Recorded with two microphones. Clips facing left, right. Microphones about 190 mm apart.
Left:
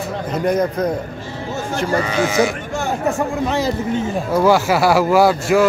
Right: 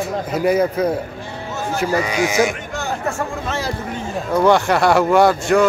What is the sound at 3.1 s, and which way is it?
Speech, 15° left (ahead or behind).